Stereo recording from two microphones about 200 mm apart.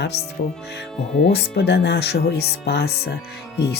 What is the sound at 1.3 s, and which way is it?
Speech, 55° left (ahead or behind).